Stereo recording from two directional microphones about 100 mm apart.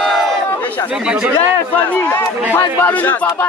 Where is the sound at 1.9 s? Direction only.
20° left (ahead or behind).